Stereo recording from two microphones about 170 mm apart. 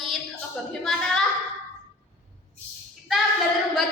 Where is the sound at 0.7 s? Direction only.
Centre (ahead or behind).